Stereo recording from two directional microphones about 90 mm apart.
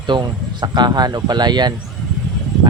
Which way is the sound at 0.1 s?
55° right (ahead or behind).